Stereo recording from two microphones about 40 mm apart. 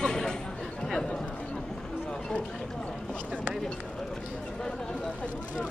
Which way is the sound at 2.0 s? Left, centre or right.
Left.